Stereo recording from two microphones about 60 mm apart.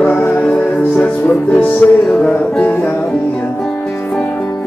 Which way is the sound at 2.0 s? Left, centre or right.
Centre.